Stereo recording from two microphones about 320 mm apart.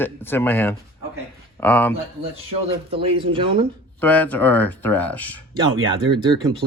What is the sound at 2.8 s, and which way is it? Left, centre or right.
Speech, centre.